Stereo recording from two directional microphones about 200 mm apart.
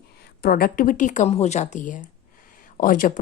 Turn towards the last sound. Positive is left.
turn(degrees=40)  # may be behind; listen again after turning